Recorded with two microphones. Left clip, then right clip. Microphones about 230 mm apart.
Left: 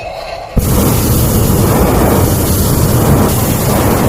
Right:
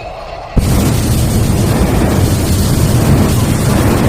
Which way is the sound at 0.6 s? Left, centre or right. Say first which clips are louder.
Left 2 dB; left.